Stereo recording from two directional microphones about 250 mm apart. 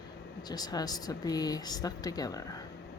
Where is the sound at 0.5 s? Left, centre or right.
Centre.